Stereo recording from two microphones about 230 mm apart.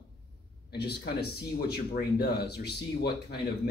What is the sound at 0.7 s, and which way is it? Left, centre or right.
Speech, left.